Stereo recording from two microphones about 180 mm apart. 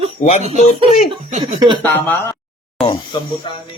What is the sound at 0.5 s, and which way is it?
Speech, 40° left (ahead or behind).